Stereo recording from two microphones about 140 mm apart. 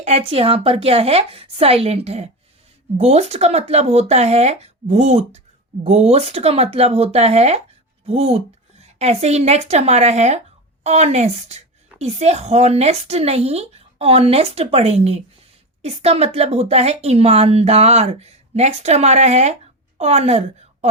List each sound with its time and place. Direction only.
0.0 s a woman's voice: 45° right (ahead or behind)